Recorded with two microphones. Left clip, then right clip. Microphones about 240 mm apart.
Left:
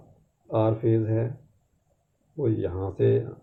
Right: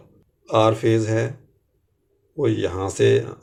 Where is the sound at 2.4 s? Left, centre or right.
Centre.